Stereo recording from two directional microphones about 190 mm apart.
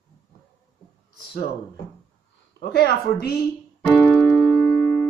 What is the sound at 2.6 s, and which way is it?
Speech, 55° left (ahead or behind).